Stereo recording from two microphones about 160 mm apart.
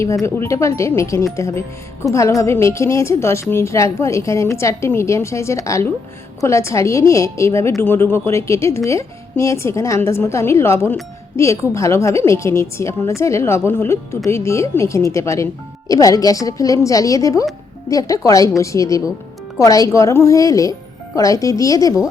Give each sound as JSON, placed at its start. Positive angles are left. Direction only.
{"t": 0.0, "sound": "a woman's voice", "side_deg": 20}